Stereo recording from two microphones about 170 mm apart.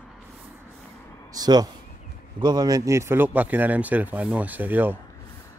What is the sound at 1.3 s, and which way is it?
Speech, 25° right (ahead or behind).